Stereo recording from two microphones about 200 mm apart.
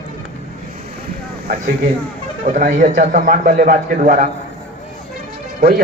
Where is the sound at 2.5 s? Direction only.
40° right (ahead or behind).